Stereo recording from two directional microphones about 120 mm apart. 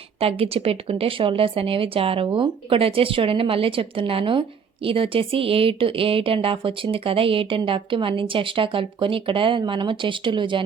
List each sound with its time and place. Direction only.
0.2 s speech: 55° right (ahead or behind)